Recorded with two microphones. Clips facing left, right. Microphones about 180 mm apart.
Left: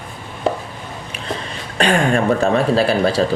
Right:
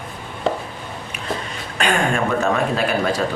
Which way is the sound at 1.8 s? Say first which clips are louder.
Left 4 dB; 35° left (ahead or behind).